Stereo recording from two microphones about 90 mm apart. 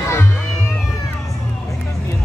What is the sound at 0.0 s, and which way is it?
Music, 30° left (ahead or behind).